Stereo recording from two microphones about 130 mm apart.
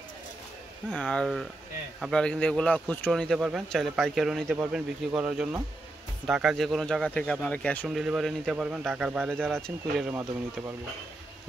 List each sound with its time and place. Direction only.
0.9 s speech: 5° left (ahead or behind)
3.3 s speech: 5° right (ahead or behind); by 7.9 s 10° left (ahead or behind)
7.9 s speech: 5° right (ahead or behind)